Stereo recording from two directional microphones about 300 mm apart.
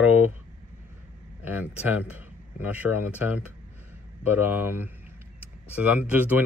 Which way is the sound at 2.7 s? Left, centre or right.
Centre.